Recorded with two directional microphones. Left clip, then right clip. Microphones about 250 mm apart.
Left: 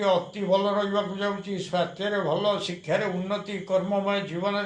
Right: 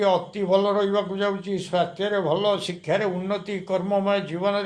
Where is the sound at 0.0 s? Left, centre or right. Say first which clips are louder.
Right 2 dB; right.